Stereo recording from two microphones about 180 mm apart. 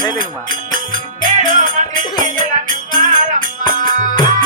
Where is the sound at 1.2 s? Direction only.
45° right (ahead or behind).